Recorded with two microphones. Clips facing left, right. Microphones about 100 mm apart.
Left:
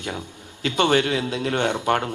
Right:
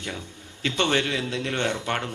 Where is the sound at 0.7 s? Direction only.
45° left (ahead or behind).